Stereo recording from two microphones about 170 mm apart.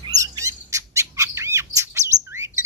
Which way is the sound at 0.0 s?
25° right (ahead or behind).